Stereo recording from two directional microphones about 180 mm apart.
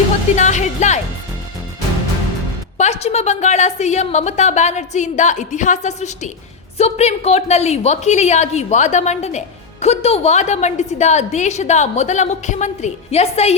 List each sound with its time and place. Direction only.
0.3 s a woman's voice: 40° left (ahead or behind)
2.7 s a woman's voice: 40° left (ahead or behind)